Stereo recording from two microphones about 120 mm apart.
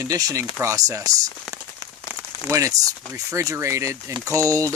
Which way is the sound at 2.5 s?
25° right (ahead or behind).